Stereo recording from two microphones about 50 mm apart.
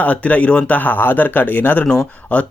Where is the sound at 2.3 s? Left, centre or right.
Left.